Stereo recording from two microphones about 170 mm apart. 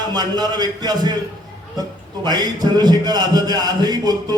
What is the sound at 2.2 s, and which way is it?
Speech, 25° right (ahead or behind).